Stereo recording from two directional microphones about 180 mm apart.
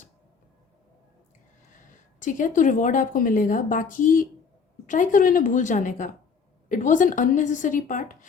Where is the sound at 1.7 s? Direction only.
45° left (ahead or behind).